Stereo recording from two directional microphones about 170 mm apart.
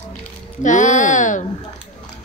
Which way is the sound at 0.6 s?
45° left (ahead or behind).